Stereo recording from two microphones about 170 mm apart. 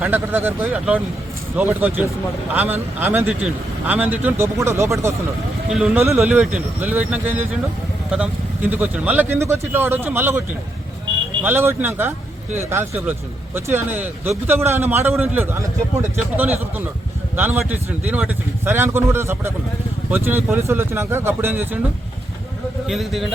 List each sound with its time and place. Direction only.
0.0 s a man's voice: 10° right (ahead or behind)
11.4 s a man's voice: 15° right (ahead or behind)
22.9 s a man's voice: centre (ahead or behind)